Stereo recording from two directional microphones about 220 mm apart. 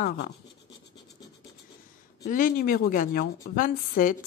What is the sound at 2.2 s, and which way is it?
Speech, 40° left (ahead or behind).